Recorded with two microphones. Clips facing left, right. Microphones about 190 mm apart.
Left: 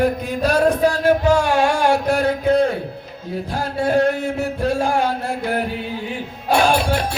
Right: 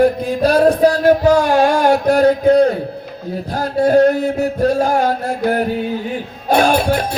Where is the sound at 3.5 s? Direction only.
40° right (ahead or behind).